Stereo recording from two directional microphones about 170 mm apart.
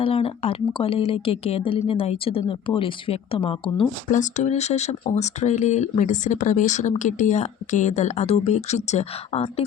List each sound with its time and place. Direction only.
0.0 s speech: 35° left (ahead or behind)
4.1 s speech: 45° left (ahead or behind)